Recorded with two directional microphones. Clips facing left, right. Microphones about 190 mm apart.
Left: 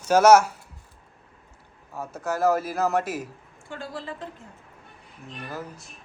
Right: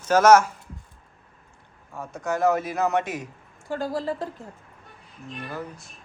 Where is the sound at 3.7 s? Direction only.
40° right (ahead or behind).